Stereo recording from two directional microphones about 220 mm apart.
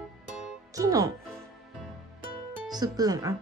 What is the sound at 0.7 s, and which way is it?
Speech, 15° right (ahead or behind).